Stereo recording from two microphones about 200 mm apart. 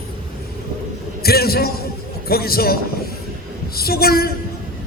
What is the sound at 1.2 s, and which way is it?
A man's voice, 50° left (ahead or behind).